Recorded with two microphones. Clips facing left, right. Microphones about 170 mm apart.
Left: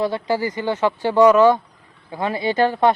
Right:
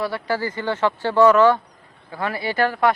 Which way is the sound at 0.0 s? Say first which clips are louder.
Left 3 dB; 20° left (ahead or behind).